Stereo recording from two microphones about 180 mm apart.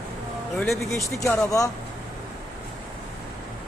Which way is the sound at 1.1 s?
15° left (ahead or behind).